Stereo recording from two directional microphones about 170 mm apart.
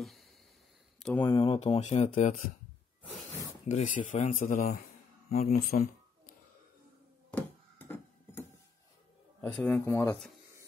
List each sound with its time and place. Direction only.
0.0 s a sound: centre (ahead or behind)
1.2 s speech: 30° left (ahead or behind); by 2.4 s 45° left (ahead or behind)
3.6 s speech: 45° left (ahead or behind)
5.3 s speech: 40° left (ahead or behind)
5.7 s a sound: 55° left (ahead or behind)
7.3 s music: 10° left (ahead or behind)
9.6 s speech: 10° left (ahead or behind)